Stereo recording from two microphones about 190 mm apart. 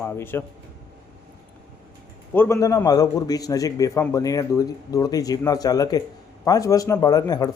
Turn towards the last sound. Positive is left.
turn(degrees=20)  # may be behind; listen again after turning